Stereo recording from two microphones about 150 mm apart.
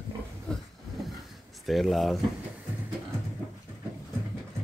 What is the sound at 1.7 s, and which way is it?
Speech, centre (ahead or behind).